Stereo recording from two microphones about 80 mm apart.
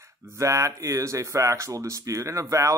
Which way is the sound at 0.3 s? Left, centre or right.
Right.